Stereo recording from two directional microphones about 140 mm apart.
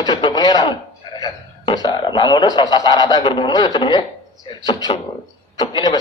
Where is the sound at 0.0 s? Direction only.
30° left (ahead or behind).